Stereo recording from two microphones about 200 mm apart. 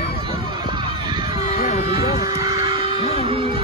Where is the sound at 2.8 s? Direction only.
30° left (ahead or behind).